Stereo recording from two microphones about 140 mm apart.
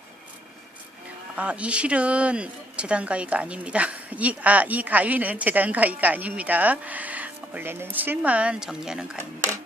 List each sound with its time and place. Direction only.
1.4 s speech: 10° right (ahead or behind)